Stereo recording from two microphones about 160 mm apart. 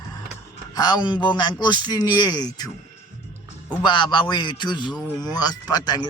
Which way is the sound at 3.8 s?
30° left (ahead or behind).